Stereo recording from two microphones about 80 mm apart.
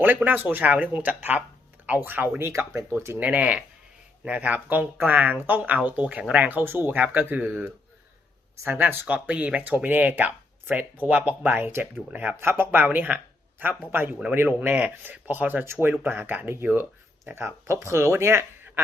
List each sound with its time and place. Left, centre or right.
0.0 s speech: right